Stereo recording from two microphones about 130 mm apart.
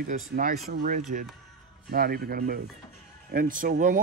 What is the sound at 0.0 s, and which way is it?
Speech, 90° right.